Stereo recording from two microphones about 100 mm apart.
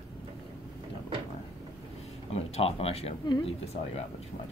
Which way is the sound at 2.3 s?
85° left.